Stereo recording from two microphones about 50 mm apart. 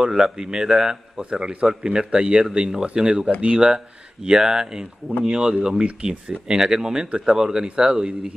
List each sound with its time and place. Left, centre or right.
0.0 s speech: centre